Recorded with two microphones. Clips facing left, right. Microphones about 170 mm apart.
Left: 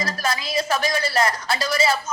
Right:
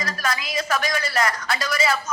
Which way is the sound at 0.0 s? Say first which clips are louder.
Left 2 dB; 30° left (ahead or behind).